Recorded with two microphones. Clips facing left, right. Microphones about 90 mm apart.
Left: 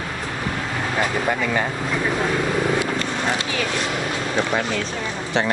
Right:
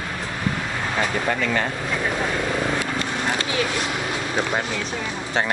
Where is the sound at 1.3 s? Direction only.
15° left (ahead or behind).